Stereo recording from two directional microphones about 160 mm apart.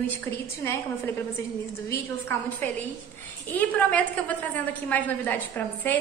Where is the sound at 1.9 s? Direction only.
15° left (ahead or behind).